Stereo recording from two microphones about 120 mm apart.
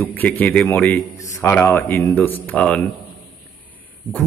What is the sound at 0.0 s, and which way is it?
A man's voice, 15° left (ahead or behind).